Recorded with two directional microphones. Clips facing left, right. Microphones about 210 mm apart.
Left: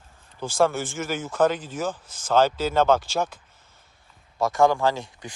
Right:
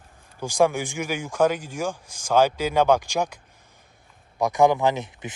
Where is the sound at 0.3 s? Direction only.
15° right (ahead or behind).